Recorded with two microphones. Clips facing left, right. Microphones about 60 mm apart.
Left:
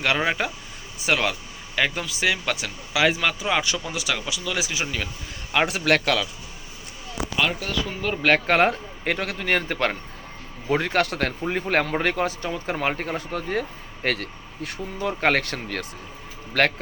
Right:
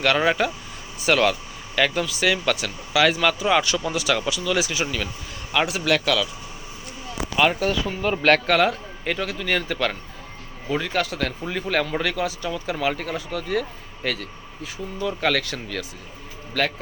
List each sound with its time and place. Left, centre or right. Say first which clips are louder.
0.0 s speech: right 3 dB; centre
4.7 s speech: right 2 dB; left
5.5 s speech: left 1 dB; left
7.9 s speech: right 3 dB; centre
8.4 s speech: even; left
9.0 s speech: left 1 dB; left
10.7 s speech: left 2 dB; left
11.4 s speech: left 2 dB; left
15.0 s speech: left 1 dB; left